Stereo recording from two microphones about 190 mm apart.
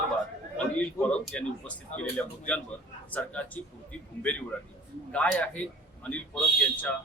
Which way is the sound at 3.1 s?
10° left (ahead or behind).